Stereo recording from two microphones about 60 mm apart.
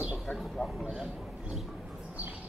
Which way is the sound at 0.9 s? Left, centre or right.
Centre.